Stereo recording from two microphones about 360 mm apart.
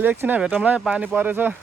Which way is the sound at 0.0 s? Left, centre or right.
Centre.